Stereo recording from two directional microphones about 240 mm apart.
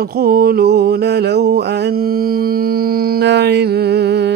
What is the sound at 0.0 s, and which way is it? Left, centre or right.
Mantra, right.